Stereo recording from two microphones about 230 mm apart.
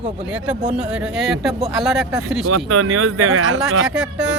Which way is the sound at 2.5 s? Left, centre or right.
Right.